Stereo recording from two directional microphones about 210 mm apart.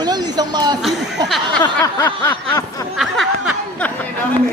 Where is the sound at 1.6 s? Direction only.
20° left (ahead or behind).